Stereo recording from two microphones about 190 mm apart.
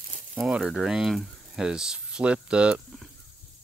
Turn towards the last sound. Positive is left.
turn(degrees=-5)  # may be behind; listen again after turning